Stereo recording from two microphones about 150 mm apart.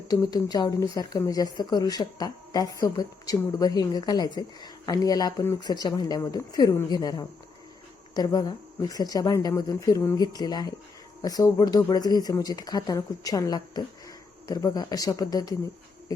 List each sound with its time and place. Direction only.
0.1 s speech: 25° left (ahead or behind)